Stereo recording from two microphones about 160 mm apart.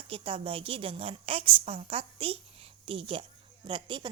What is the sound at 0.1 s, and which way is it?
A woman's voice, 35° right (ahead or behind).